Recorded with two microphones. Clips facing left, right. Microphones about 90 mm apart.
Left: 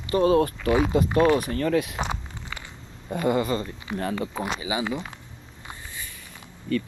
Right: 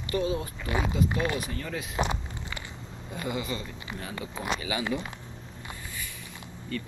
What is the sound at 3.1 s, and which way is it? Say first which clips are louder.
Speech: left 9 dB; 50° left (ahead or behind).